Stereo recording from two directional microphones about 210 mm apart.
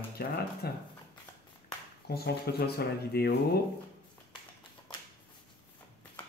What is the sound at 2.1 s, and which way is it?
Speech, 50° left (ahead or behind).